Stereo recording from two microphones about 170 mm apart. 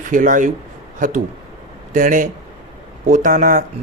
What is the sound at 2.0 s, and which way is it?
A man's voice, 50° right (ahead or behind).